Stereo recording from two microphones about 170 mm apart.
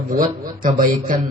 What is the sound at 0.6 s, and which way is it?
Speech, 55° right (ahead or behind).